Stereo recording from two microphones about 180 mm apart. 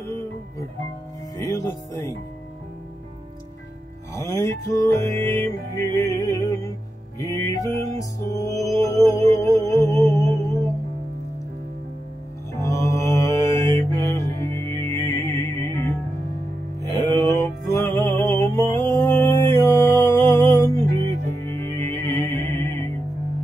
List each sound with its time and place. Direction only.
1.4 s music: 15° left (ahead or behind)
4.1 s music: 15° left (ahead or behind)
12.5 s mantra: 15° left (ahead or behind)
14.9 s music: 15° left (ahead or behind)
18.0 s mantra: 15° left (ahead or behind)
21.4 s music: 15° left (ahead or behind)